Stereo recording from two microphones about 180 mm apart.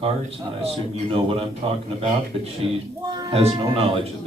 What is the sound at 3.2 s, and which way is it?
Speech, 35° right (ahead or behind).